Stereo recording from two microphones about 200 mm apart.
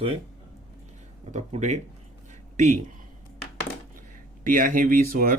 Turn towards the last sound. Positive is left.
turn(degrees=-45)  # may be behind; listen again after turning